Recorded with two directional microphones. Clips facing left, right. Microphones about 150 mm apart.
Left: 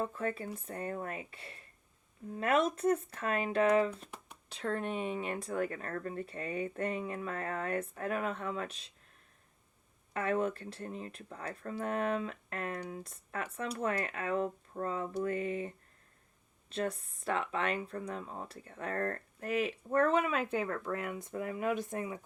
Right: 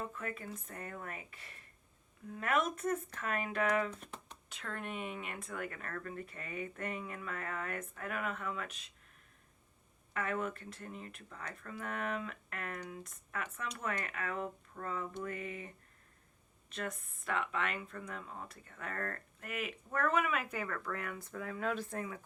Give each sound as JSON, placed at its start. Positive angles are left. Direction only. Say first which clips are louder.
{"t": 0.0, "sound": "speech", "louder": "left 7 dB", "side_deg": 30}
{"t": 10.2, "sound": "speech", "louder": "left 5 dB", "side_deg": 30}